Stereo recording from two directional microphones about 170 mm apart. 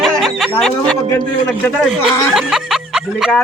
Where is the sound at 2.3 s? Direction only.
Centre (ahead or behind).